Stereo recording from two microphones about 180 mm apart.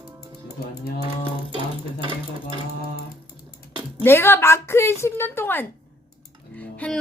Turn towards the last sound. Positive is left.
turn(degrees=5)  # may be behind; listen again after turning